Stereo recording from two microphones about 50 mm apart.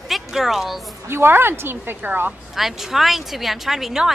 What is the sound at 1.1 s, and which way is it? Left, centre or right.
A woman's voice, right.